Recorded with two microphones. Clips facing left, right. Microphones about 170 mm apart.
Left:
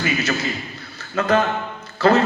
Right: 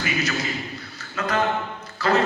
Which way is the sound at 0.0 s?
25° left (ahead or behind).